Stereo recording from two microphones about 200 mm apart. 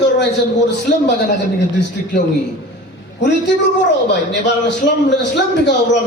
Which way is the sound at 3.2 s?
60° left (ahead or behind).